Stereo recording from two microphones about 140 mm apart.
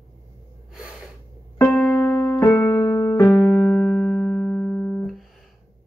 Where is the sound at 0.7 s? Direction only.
5° right (ahead or behind).